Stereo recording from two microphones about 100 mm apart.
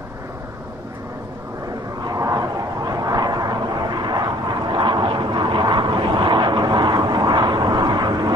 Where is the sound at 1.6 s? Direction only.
40° right (ahead or behind).